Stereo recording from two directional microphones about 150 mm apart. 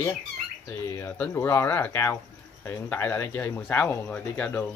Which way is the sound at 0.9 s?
15° left (ahead or behind).